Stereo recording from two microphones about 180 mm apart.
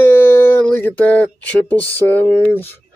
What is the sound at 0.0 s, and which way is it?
Speech, 15° left (ahead or behind).